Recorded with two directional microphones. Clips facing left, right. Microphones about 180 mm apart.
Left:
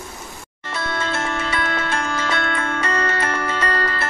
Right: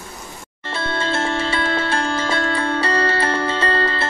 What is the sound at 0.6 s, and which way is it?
Music, 30° right (ahead or behind).